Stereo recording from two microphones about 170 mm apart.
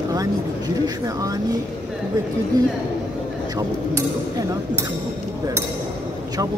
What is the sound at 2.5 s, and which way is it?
Speech, 20° right (ahead or behind).